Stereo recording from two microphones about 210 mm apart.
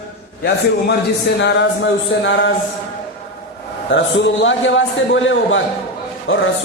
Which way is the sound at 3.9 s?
60° left (ahead or behind).